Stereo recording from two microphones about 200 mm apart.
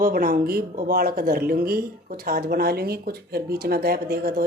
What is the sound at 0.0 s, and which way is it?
Speech, 45° right (ahead or behind).